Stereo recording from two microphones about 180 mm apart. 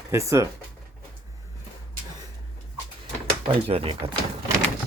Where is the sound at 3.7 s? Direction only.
30° right (ahead or behind).